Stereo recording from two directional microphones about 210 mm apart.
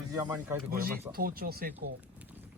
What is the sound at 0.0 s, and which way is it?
Speech, 15° right (ahead or behind).